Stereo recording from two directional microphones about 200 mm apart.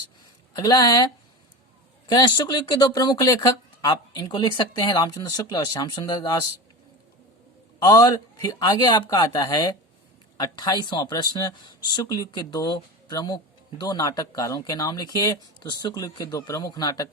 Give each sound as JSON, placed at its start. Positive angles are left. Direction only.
{"t": 0.5, "sound": "speech", "side_deg": 20}
{"t": 7.8, "sound": "speech", "side_deg": 20}